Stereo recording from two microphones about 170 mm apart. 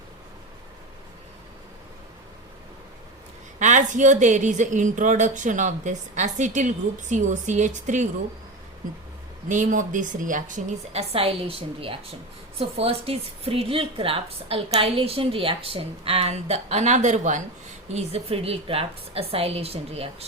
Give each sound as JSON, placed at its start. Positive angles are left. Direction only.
{"t": 3.6, "sound": "a woman's voice", "side_deg": -45}
{"t": 9.5, "sound": "a woman's voice", "side_deg": -50}
{"t": 17.9, "sound": "a woman's voice", "side_deg": -35}